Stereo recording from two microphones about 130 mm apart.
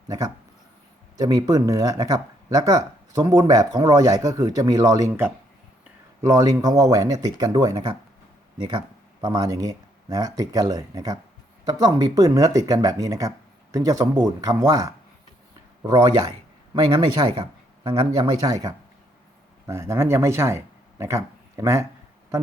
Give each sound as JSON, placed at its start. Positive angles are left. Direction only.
{"t": 1.1, "sound": "speech", "side_deg": -30}